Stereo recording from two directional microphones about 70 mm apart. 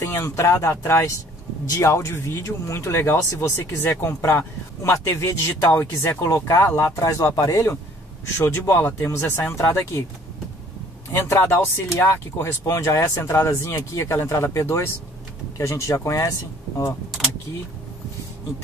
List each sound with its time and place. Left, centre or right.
0.0 s speech: left
3.9 s speech: left
7.0 s speech: left
7.5 s speech: left
11.1 s speech: left